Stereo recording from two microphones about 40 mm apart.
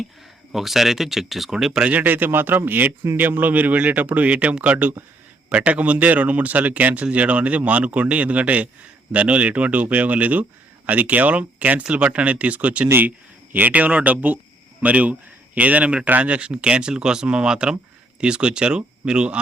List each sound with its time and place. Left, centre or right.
0.5 s speech: centre
1.8 s speech: right
2.0 s a man's voice: right
11.8 s a man's voice: right